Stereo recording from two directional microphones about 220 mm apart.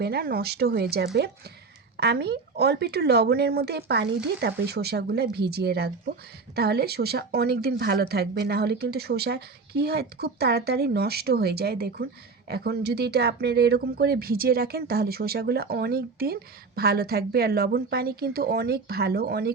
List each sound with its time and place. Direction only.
0.0 s speech: 45° right (ahead or behind)